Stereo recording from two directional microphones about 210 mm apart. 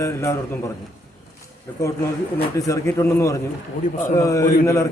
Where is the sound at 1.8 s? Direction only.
15° left (ahead or behind).